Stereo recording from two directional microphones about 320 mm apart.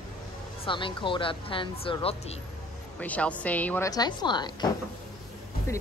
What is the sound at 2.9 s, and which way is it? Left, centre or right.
A woman's voice, centre.